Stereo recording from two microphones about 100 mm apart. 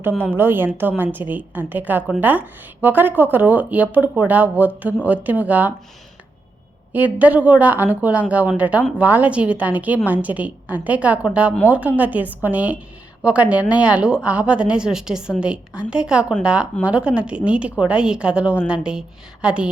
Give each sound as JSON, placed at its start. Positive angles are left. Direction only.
{"t": 0.3, "sound": "a woman's voice", "side_deg": -20}
{"t": 6.9, "sound": "speech", "side_deg": -15}